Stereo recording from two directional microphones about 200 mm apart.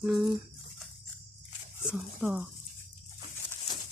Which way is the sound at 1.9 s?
5° right (ahead or behind).